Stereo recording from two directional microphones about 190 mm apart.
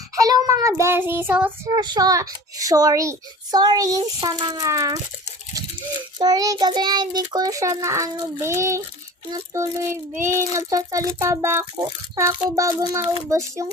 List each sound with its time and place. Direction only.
0.2 s child singing: 20° right (ahead or behind)
1.7 s a child's voice: 20° right (ahead or behind)
6.1 s a child's voice: 20° right (ahead or behind)